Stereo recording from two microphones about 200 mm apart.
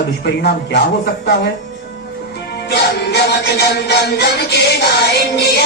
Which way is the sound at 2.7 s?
55° left (ahead or behind).